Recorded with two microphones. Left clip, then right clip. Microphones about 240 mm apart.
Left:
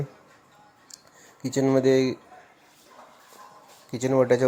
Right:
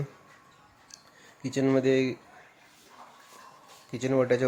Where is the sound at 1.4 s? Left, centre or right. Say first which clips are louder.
Left 4 dB; centre.